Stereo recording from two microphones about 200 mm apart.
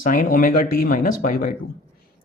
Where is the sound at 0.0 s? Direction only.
45° left (ahead or behind).